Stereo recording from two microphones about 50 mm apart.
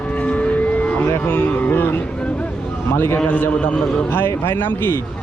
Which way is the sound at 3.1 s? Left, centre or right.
Left.